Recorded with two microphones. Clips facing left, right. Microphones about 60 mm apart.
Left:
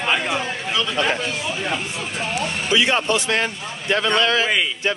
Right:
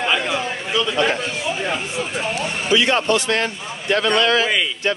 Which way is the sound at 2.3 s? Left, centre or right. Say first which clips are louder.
Right 1 dB; centre.